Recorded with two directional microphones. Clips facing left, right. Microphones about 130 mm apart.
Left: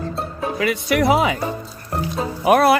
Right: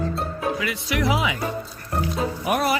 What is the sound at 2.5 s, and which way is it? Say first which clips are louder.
Speech: left 9 dB; 70° left (ahead or behind).